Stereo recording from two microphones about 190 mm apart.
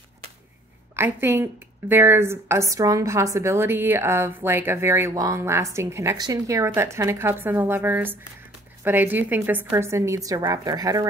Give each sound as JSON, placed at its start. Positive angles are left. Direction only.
{"t": 0.9, "sound": "a woman's voice", "side_deg": -10}